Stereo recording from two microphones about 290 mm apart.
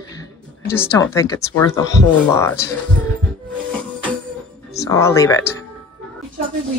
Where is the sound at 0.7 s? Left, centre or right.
Centre.